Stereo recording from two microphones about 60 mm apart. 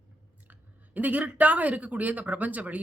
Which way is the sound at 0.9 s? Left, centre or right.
Right.